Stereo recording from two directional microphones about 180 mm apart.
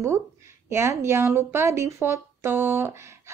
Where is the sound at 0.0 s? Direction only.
15° right (ahead or behind).